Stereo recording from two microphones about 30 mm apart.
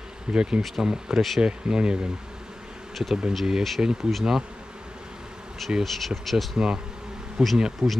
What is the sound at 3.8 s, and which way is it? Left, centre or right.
Speech, right.